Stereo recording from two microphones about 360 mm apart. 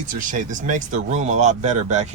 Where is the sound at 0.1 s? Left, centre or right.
Right.